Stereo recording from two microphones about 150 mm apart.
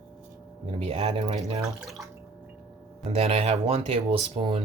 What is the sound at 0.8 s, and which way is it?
Speech, 45° right (ahead or behind).